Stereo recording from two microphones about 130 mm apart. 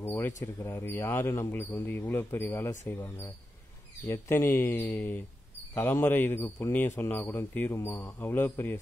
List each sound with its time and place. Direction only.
0.0 s speech: 15° left (ahead or behind)